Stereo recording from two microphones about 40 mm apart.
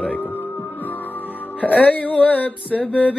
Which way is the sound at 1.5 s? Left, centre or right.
Left.